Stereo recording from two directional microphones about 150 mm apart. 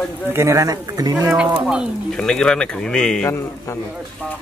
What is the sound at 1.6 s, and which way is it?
Speech, 5° right (ahead or behind).